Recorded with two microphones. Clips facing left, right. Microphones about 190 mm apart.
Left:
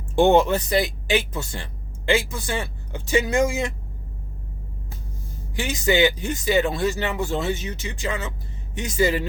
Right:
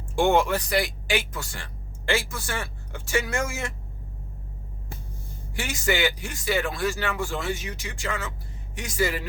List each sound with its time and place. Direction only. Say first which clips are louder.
0.2 s speech: left 5 dB; 20° left (ahead or behind)
5.5 s speech: left 6 dB; 20° left (ahead or behind)